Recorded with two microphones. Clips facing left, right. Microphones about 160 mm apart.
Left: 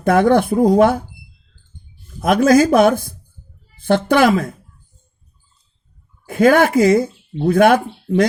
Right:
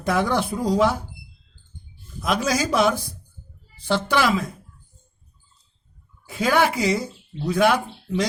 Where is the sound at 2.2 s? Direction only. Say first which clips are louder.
Left 11 dB; 55° left (ahead or behind).